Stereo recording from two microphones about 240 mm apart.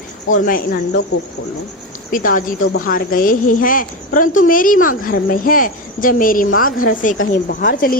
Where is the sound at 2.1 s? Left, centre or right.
Left.